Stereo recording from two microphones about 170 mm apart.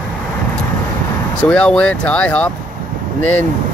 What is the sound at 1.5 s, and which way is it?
Speech, 5° left (ahead or behind).